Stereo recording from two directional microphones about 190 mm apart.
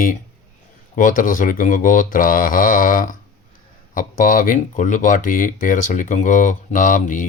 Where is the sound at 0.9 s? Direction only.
45° left (ahead or behind).